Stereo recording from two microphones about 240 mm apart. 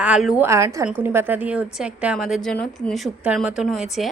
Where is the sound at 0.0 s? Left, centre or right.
Centre.